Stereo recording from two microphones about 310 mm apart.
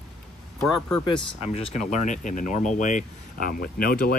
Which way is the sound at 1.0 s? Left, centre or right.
Centre.